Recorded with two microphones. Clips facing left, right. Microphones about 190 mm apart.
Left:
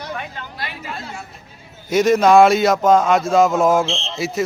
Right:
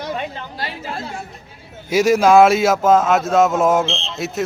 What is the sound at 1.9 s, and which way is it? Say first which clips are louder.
Speech: even; 5° right (ahead or behind).